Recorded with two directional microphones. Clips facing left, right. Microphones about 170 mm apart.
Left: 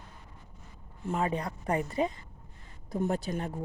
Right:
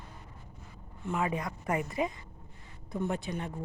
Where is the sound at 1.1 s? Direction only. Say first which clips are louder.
Left 1 dB; 35° left (ahead or behind).